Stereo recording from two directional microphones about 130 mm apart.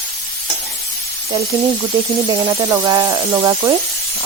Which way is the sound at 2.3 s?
35° right (ahead or behind).